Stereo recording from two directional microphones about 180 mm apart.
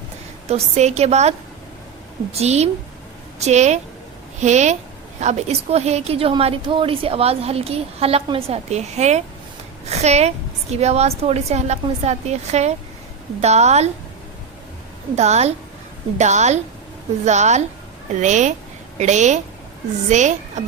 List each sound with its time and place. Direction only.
0.4 s a woman's voice: 35° right (ahead or behind)
15.1 s a woman's voice: 40° right (ahead or behind)